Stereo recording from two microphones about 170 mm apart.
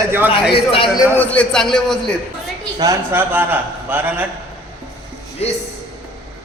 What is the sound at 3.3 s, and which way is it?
Speech, 10° right (ahead or behind).